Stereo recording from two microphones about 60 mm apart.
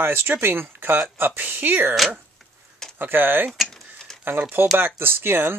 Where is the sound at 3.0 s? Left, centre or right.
Right.